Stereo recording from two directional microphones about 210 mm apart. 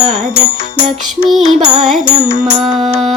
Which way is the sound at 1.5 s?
Centre (ahead or behind).